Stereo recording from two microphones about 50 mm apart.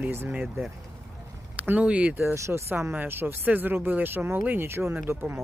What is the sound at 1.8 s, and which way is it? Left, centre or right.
Speech, right.